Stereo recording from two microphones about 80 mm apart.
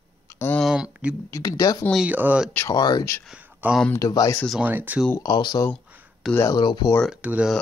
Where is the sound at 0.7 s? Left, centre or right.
Centre.